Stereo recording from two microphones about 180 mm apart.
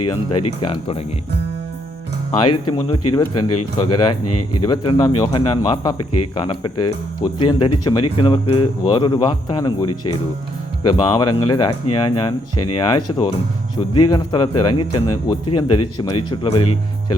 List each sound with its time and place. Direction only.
0.3 s speech: 30° left (ahead or behind)
2.4 s speech: 25° left (ahead or behind)